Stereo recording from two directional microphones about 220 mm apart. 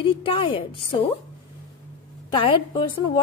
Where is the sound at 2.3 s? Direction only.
25° left (ahead or behind).